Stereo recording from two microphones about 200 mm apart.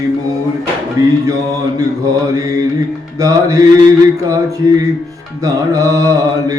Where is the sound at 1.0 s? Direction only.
15° right (ahead or behind).